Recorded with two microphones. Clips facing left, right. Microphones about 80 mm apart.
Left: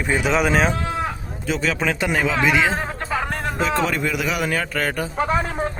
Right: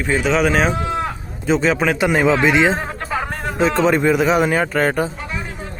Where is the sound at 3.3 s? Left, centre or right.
Centre.